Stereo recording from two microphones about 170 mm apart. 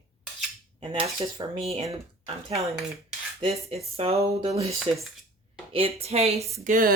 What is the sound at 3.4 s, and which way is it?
Speech, 35° right (ahead or behind).